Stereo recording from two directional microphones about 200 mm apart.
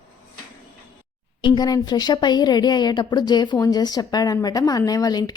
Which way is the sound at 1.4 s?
20° left (ahead or behind).